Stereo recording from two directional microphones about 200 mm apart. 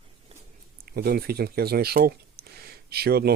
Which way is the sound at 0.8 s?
50° right (ahead or behind).